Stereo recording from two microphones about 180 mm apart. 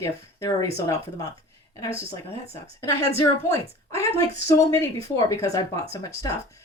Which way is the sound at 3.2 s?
15° left (ahead or behind).